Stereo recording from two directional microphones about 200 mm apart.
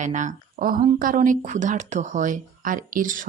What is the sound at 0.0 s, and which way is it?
Speech, 35° right (ahead or behind).